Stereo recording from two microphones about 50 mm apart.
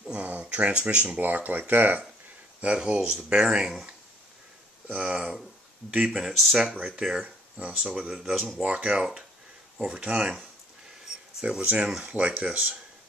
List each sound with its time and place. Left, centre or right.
0.1 s speech: right
1.2 s speech: right
2.6 s speech: right
6.1 s speech: centre
8.1 s speech: centre
11.4 s speech: right